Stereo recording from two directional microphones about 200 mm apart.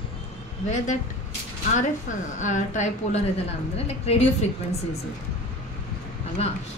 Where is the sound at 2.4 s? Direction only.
40° left (ahead or behind).